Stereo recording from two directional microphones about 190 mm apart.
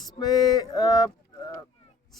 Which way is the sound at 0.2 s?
20° left (ahead or behind).